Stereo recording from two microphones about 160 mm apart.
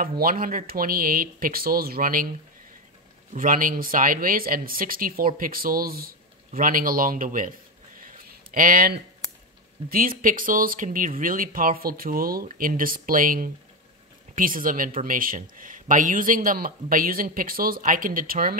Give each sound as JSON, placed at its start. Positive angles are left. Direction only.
{"t": 0.0, "sound": "speech", "side_deg": -65}
{"t": 3.3, "sound": "speech", "side_deg": -60}
{"t": 8.0, "sound": "a sound", "side_deg": -60}
{"t": 9.8, "sound": "speech", "side_deg": -60}